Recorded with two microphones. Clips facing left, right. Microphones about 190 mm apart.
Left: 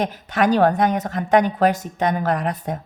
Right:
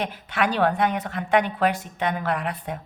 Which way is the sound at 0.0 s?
40° left (ahead or behind).